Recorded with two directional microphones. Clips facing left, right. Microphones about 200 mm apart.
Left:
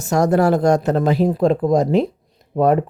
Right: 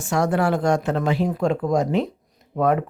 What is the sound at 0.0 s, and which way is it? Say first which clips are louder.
Speech: left 5 dB; 40° left (ahead or behind).